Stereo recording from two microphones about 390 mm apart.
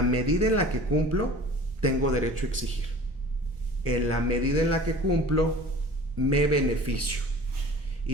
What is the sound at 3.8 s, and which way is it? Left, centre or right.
Speech, right.